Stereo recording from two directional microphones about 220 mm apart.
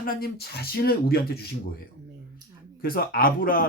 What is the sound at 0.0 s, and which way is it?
Speech, 40° left (ahead or behind).